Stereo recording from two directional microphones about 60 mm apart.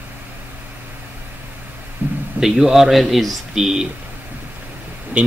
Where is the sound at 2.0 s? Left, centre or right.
Right.